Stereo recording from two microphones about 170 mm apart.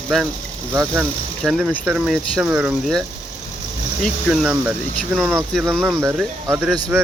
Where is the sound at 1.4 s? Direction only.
5° right (ahead or behind).